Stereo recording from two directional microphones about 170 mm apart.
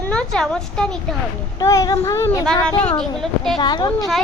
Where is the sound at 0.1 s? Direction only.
5° left (ahead or behind).